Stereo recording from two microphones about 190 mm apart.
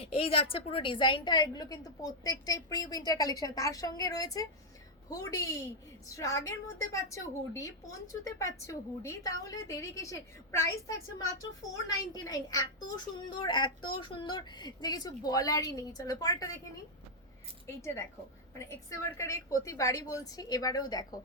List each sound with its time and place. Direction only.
0.0 s a woman's voice: 30° left (ahead or behind)
17.7 s a woman's voice: 15° left (ahead or behind)